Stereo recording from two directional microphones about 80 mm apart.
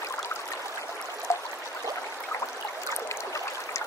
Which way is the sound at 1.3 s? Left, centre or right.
Left.